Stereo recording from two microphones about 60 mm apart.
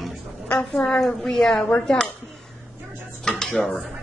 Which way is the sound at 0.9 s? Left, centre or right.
Centre.